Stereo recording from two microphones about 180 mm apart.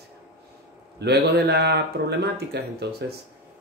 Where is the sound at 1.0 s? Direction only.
70° right (ahead or behind).